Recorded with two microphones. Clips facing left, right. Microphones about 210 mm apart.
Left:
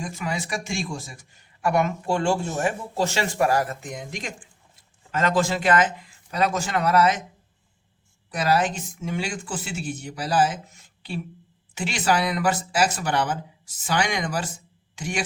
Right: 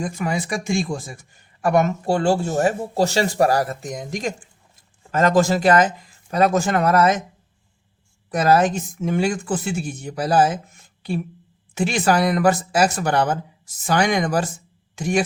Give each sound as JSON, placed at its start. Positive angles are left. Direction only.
{"t": 0.0, "sound": "speech", "side_deg": -50}
{"t": 8.3, "sound": "speech", "side_deg": -45}